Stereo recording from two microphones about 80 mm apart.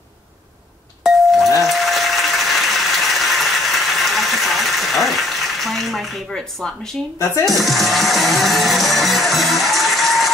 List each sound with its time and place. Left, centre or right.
1.0 s ding: centre
1.7 s a sound: centre
7.4 s music: centre